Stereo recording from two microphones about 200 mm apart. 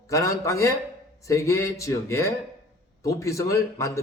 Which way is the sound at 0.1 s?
15° left (ahead or behind).